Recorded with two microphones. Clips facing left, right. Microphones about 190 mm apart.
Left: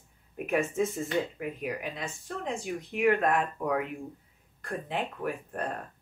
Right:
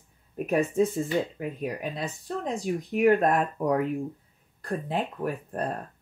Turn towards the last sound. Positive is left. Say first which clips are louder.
# right 3 dB
turn(degrees=-35)  # may be behind; listen again after turning